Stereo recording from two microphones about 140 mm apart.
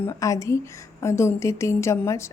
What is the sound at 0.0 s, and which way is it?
A woman's voice, 20° left (ahead or behind).